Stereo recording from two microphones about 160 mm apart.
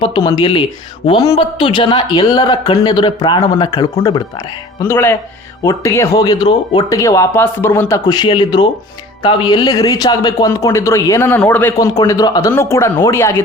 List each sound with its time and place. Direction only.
0.0 s speech: 30° left (ahead or behind); by 11.9 s 10° left (ahead or behind)
11.9 s speech: 25° left (ahead or behind)